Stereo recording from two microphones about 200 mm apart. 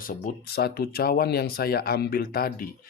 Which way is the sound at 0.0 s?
45° left (ahead or behind).